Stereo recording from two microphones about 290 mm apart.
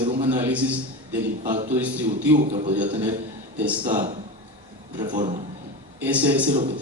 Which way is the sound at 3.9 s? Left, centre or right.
Right.